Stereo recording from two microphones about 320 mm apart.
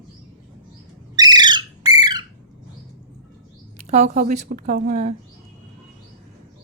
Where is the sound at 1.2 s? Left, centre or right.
Centre.